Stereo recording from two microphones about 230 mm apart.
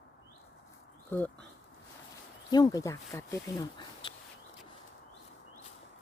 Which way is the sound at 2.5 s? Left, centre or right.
Centre.